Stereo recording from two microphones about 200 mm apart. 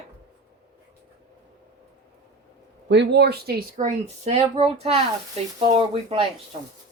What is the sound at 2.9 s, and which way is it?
Speech, 60° right (ahead or behind).